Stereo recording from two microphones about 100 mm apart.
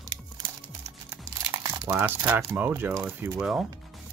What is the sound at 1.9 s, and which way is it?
Speech, 20° right (ahead or behind).